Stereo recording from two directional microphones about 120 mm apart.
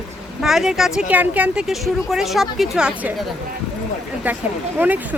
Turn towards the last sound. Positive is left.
turn(degrees=-15)  # may be behind; listen again after turning